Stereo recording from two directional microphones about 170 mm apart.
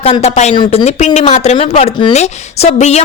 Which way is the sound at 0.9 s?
40° left (ahead or behind).